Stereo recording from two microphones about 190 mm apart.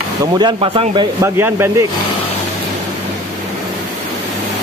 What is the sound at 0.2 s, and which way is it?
Speech, 20° right (ahead or behind).